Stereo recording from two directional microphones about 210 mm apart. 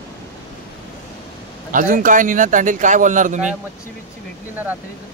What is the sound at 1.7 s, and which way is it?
A man's voice, 40° right (ahead or behind).